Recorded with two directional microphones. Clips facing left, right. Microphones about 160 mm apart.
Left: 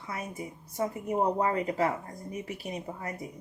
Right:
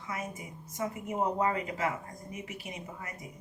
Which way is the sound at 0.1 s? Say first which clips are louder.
Left 2 dB; 35° left (ahead or behind).